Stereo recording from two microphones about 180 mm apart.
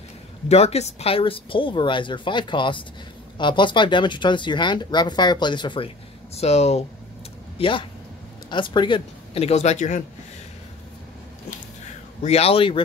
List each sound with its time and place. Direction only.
0.5 s speech: 35° left (ahead or behind)
12.2 s speech: 35° left (ahead or behind)